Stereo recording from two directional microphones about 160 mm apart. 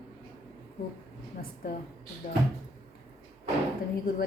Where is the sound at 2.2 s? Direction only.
55° left (ahead or behind).